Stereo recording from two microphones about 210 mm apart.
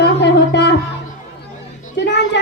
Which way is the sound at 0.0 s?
55° left (ahead or behind).